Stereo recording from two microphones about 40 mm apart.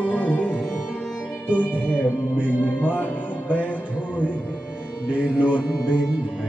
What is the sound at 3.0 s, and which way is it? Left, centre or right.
Music, left.